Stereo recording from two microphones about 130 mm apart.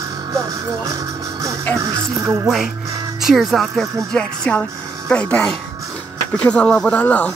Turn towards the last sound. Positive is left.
turn(degrees=10)  # may be behind; listen again after turning